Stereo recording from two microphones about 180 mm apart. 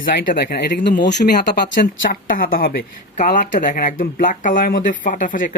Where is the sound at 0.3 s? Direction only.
55° left (ahead or behind); by 1.9 s 75° left (ahead or behind).